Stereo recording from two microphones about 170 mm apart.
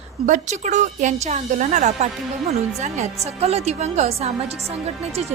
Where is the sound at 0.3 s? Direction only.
45° right (ahead or behind).